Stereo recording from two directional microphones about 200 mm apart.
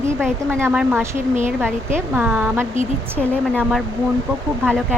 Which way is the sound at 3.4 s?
Centre (ahead or behind).